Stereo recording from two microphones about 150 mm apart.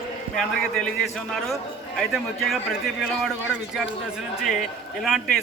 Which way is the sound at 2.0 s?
Centre (ahead or behind).